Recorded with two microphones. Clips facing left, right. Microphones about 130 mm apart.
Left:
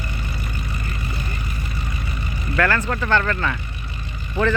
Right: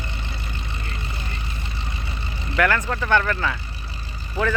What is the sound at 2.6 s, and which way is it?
Speech, 15° right (ahead or behind).